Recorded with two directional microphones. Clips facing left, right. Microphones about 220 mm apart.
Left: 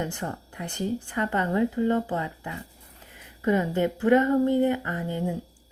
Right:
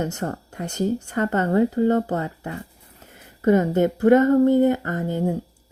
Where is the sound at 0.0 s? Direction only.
40° right (ahead or behind).